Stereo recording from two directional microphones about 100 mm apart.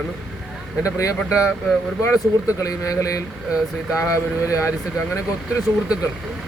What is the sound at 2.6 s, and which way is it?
Speech, 35° left (ahead or behind).